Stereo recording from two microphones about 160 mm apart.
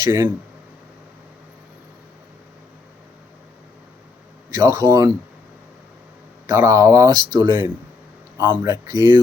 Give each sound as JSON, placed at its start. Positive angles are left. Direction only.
{"t": 0.0, "sound": "speech", "side_deg": -25}
{"t": 4.5, "sound": "speech", "side_deg": -20}
{"t": 6.5, "sound": "speech", "side_deg": -20}